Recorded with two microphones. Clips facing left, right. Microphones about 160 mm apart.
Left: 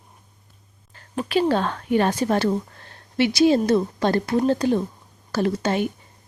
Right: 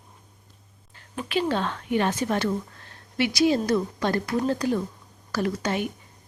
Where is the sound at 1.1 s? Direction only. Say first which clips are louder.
Left 5 dB; 40° left (ahead or behind).